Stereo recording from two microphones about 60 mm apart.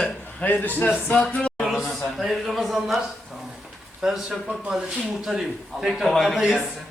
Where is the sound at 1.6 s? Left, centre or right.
Centre.